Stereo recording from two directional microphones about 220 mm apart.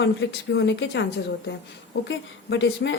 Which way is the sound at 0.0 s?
55° left (ahead or behind).